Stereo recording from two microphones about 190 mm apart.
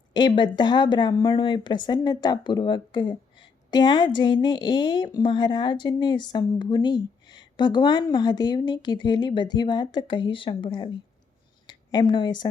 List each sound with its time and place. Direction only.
0.1 s a woman's voice: 25° left (ahead or behind)